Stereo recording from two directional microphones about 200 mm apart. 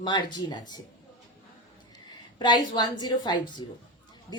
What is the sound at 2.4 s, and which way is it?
A woman's voice, 20° left (ahead or behind).